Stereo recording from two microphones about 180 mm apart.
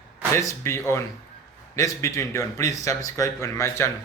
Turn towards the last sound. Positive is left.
turn(degrees=15)  # may be behind; listen again after turning